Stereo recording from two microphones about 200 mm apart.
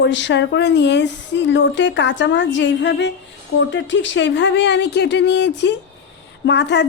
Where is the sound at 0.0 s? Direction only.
65° left (ahead or behind).